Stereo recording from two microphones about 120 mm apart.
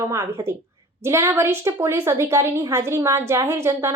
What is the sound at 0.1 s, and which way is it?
A woman's voice, 25° right (ahead or behind).